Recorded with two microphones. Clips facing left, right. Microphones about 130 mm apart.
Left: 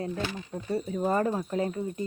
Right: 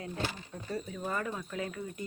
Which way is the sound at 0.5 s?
30° left (ahead or behind).